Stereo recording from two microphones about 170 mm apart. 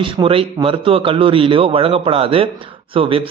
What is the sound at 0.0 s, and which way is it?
A man's voice, 30° right (ahead or behind).